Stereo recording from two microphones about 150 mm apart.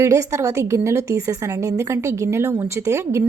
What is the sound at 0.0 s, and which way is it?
A woman's voice, 20° right (ahead or behind).